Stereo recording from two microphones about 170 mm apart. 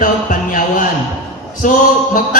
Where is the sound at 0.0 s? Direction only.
50° left (ahead or behind).